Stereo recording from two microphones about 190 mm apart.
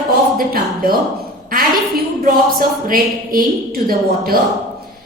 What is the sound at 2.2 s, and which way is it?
A woman's voice, 50° right (ahead or behind).